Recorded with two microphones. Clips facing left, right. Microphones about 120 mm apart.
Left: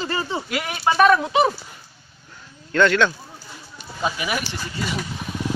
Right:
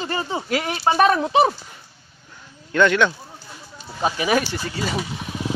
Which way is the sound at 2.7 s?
15° right (ahead or behind).